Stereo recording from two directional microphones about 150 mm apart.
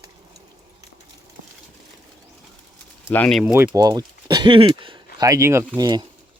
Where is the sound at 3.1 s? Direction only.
10° left (ahead or behind).